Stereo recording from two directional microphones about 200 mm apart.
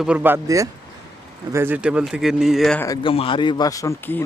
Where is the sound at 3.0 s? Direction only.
25° left (ahead or behind).